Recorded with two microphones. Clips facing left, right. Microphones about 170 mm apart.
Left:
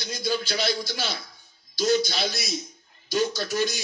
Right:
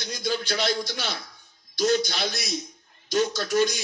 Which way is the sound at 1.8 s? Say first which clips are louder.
Even; 50° right (ahead or behind).